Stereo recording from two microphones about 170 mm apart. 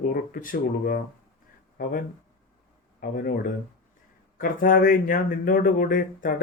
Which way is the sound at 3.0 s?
60° left (ahead or behind).